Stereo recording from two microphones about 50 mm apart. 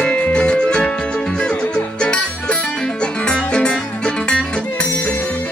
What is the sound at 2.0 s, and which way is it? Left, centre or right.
Music, centre.